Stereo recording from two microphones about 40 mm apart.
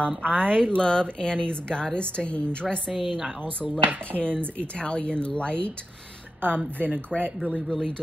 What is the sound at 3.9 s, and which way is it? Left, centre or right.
Speech, right.